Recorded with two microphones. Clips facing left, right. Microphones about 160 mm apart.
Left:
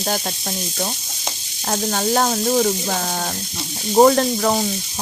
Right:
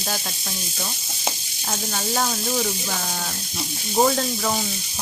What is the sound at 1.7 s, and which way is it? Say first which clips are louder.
Sizzle: left 7 dB; 55° left (ahead or behind).